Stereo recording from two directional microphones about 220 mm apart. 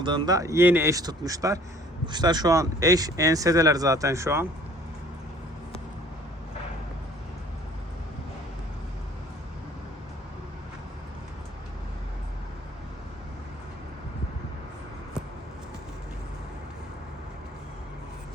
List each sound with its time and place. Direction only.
0.0 s speech: 20° right (ahead or behind)